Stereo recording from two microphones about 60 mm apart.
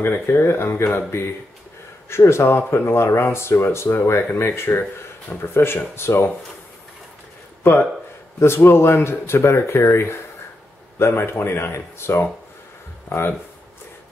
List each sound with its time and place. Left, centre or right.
0.0 s speech: left
8.4 s speech: left